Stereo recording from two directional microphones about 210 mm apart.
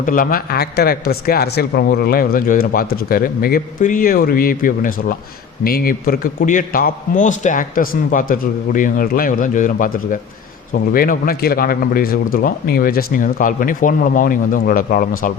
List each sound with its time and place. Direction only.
0.0 s a man's voice: 40° left (ahead or behind)